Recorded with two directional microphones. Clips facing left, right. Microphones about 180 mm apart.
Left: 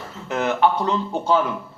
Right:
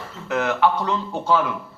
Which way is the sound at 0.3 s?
20° left (ahead or behind).